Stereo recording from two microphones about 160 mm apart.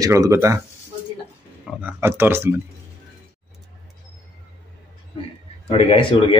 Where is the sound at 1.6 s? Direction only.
5° right (ahead or behind).